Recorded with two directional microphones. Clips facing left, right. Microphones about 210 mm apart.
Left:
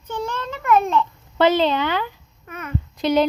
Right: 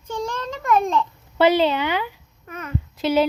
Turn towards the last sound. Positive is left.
turn(degrees=-5)  # may be behind; listen again after turning